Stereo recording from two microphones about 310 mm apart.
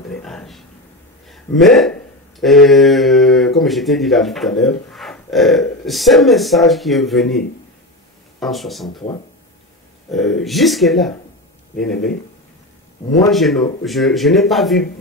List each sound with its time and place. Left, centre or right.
0.1 s a sound: centre
1.3 s speech: centre
8.8 s speech: centre
10.1 s speech: centre
13.3 s speech: centre